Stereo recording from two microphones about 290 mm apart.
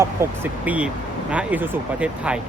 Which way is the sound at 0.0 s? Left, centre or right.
Centre.